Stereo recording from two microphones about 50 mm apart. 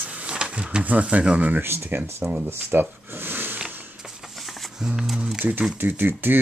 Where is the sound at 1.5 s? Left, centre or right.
Right.